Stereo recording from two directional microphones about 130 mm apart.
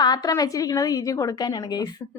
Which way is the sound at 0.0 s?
30° left (ahead or behind).